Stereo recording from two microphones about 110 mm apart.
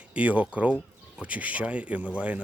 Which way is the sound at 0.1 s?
10° right (ahead or behind).